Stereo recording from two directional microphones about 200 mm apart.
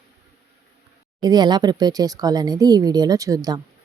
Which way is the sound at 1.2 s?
20° right (ahead or behind).